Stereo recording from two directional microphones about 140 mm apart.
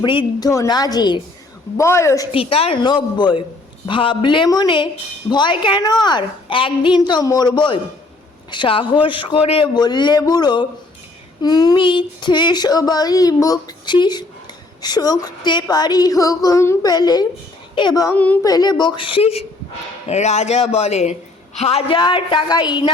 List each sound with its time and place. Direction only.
0.0 s speech: 35° left (ahead or behind)
2.3 s child singing: 45° left (ahead or behind)
9.7 s child singing: 30° left (ahead or behind)
14.8 s speech: 30° left (ahead or behind)
17.7 s child singing: 30° left (ahead or behind)
18.1 s a woman's voice: 10° left (ahead or behind)
18.4 s child singing: 30° left (ahead or behind); by 19.5 s 45° left (ahead or behind)
20.1 s speech: 55° left (ahead or behind)
21.6 s child singing: 45° left (ahead or behind); by 22.9 s 30° left (ahead or behind)